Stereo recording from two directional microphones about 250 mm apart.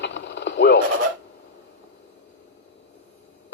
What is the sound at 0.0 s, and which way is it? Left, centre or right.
Radio, left.